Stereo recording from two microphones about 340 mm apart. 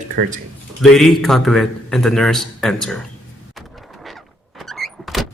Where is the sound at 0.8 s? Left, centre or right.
Centre.